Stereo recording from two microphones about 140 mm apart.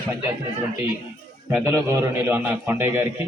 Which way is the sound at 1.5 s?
20° right (ahead or behind).